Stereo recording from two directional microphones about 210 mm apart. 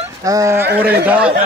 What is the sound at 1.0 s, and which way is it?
Speech, 5° right (ahead or behind).